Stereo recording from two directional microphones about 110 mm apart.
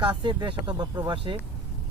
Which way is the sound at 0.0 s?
45° right (ahead or behind).